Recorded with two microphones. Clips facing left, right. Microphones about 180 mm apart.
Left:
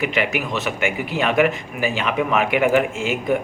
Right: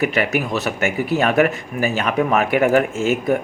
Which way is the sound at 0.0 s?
40° right (ahead or behind).